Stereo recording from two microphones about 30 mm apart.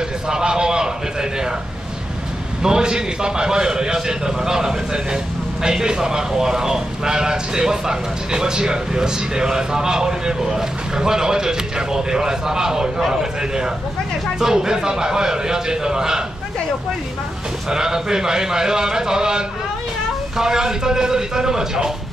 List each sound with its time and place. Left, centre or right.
0.3 s a sound: right
2.6 s a man's voice: right
17.6 s a man's voice: centre